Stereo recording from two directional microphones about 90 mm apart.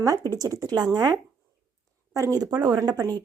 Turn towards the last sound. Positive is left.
turn(degrees=-45)  # may be behind; listen again after turning